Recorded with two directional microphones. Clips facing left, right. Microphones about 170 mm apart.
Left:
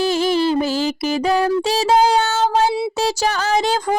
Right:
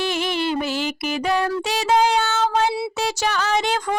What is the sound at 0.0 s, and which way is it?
Music, 35° left (ahead or behind).